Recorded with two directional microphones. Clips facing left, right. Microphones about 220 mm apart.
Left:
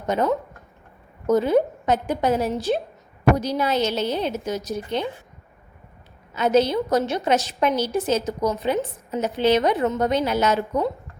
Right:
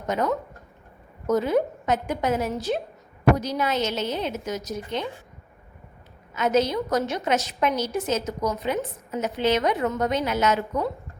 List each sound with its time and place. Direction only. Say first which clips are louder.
0.1 s a woman's voice: left 3 dB; 30° left (ahead or behind)
6.3 s a woman's voice: left 3 dB; 30° left (ahead or behind)